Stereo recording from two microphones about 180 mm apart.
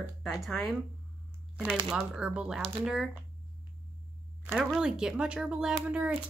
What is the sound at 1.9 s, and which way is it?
Speech, centre (ahead or behind).